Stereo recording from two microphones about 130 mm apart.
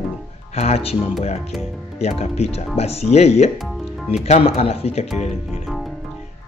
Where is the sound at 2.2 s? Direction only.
55° left (ahead or behind).